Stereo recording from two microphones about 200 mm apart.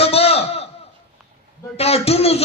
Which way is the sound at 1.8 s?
30° left (ahead or behind).